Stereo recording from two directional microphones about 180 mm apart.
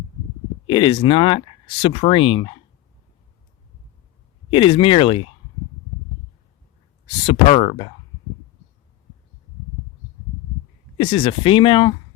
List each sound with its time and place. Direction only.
0.7 s speech: 25° left (ahead or behind)
4.5 s speech: 30° left (ahead or behind)
7.3 s speech: 30° left (ahead or behind)
10.9 s speech: 30° left (ahead or behind)